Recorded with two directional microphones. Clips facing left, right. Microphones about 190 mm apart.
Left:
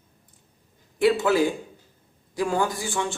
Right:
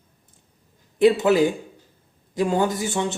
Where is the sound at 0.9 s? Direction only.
20° right (ahead or behind).